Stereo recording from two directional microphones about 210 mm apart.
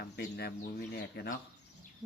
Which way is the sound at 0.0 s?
50° left (ahead or behind).